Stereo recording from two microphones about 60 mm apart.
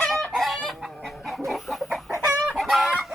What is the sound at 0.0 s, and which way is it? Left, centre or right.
Chicken, centre.